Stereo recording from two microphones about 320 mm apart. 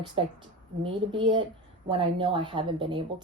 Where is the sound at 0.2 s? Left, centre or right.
Centre.